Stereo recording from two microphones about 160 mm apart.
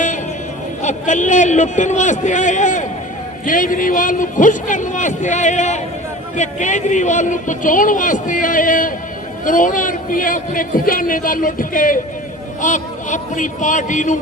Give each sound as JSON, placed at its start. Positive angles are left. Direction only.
{"t": 0.8, "sound": "a man's voice", "side_deg": 50}